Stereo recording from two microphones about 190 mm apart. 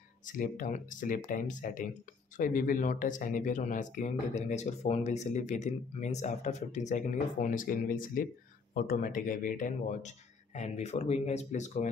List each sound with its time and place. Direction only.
0.3 s speech: 45° left (ahead or behind)